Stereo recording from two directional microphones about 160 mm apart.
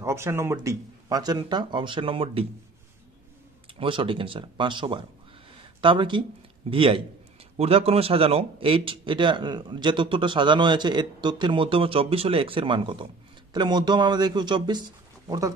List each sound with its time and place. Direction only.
0.0 s a man's voice: 15° right (ahead or behind); by 2.4 s 35° right (ahead or behind)
3.8 s a man's voice: 35° right (ahead or behind)